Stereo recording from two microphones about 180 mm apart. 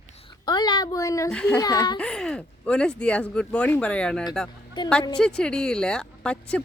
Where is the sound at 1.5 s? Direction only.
20° left (ahead or behind).